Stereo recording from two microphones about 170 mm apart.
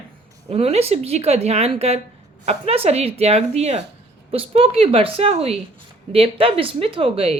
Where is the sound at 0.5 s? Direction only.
35° right (ahead or behind).